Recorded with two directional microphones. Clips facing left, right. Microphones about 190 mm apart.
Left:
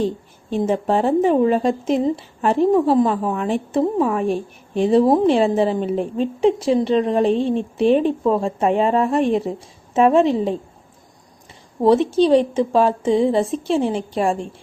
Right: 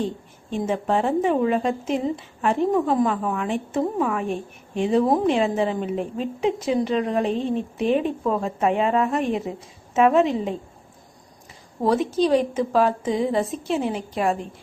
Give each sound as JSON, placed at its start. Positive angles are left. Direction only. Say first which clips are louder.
{"t": 0.5, "sound": "speech", "louder": "left 4 dB", "side_deg": 35}
{"t": 11.8, "sound": "a woman's voice", "louder": "left 6 dB", "side_deg": 25}